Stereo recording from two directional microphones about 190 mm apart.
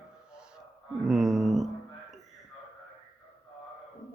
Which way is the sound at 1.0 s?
Centre (ahead or behind).